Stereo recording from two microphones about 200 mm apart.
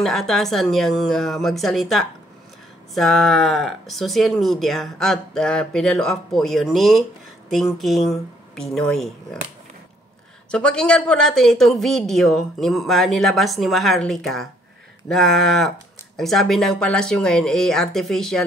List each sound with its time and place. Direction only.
0.0 s speech: centre (ahead or behind)
10.5 s speech: 5° left (ahead or behind)